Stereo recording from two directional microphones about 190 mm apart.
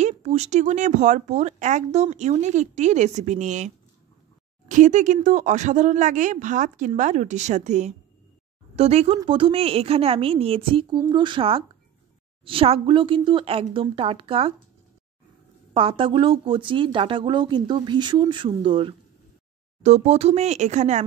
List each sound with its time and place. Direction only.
0.0 s speech: 35° right (ahead or behind)
15.7 s speech: 25° right (ahead or behind)